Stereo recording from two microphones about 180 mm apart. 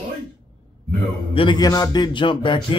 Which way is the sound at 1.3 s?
25° left (ahead or behind).